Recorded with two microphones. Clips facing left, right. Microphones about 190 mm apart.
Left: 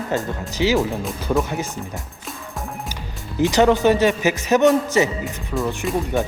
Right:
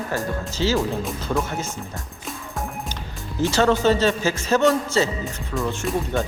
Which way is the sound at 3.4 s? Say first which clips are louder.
Left 3 dB; 15° left (ahead or behind).